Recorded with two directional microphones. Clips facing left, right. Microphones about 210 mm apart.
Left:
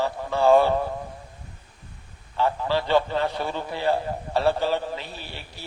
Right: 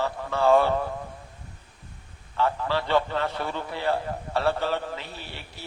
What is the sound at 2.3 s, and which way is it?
A man's voice, 15° left (ahead or behind).